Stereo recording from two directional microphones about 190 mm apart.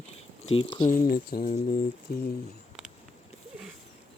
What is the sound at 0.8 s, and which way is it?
Speech, 45° left (ahead or behind).